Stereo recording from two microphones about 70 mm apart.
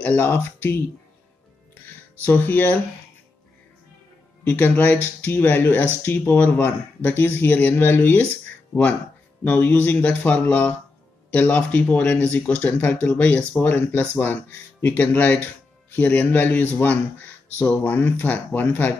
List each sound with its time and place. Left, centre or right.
0.0 s speech: left
0.3 s speech: left
2.2 s speech: left
4.5 s speech: left
9.4 s speech: left